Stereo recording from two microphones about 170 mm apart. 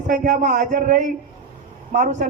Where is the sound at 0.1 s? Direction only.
45° right (ahead or behind).